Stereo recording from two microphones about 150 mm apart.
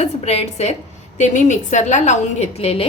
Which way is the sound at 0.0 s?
45° left (ahead or behind).